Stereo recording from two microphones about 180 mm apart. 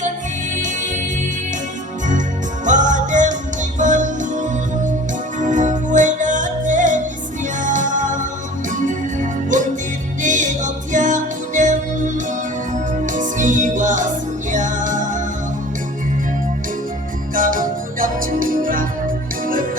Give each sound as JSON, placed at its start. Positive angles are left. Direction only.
{"t": 0.5, "sound": "music", "side_deg": -45}
{"t": 2.6, "sound": "music", "side_deg": -45}
{"t": 17.3, "sound": "music", "side_deg": -50}